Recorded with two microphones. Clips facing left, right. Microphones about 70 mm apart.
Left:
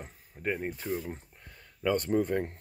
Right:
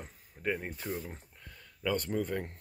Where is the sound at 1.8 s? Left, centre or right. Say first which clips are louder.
Left 5 dB; left.